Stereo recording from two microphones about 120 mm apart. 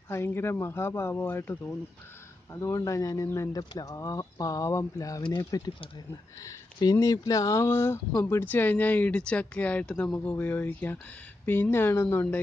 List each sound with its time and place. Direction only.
0.1 s speech: 20° left (ahead or behind)